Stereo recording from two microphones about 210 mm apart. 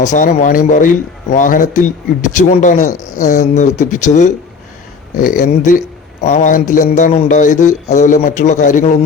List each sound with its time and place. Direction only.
0.0 s speech: 35° left (ahead or behind)